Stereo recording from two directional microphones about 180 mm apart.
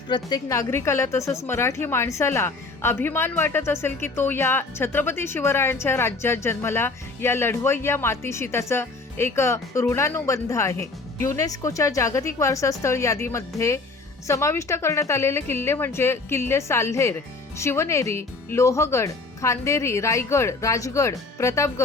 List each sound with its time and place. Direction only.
0.1 s a woman's voice: 20° left (ahead or behind)